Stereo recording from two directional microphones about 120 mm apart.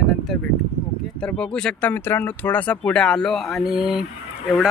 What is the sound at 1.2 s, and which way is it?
Speech, 10° left (ahead or behind).